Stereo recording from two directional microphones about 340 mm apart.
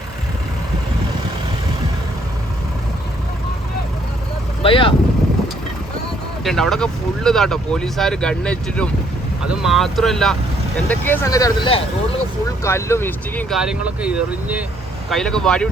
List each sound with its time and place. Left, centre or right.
4.6 s vehicle: centre
6.4 s speech: centre